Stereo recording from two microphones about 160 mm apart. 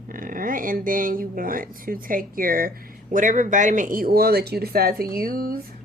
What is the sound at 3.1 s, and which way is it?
Speech, 55° right (ahead or behind).